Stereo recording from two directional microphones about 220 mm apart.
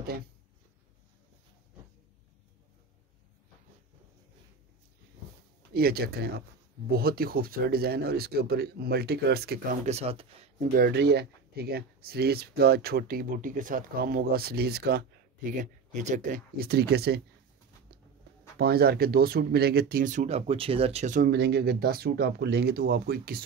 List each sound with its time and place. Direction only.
5.7 s speech: 45° right (ahead or behind)
9.8 s speech: 30° right (ahead or behind)
10.7 s speech: 45° right (ahead or behind)
15.6 s speech: 35° right (ahead or behind)
18.6 s speech: 45° right (ahead or behind)